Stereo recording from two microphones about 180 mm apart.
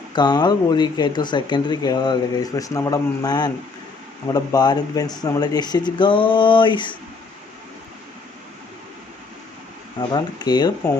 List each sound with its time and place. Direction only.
0.1 s speech: 25° left (ahead or behind)
10.1 s speech: 20° left (ahead or behind)